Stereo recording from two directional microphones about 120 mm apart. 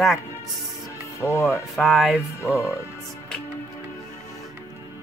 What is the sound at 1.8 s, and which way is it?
Speech, centre (ahead or behind).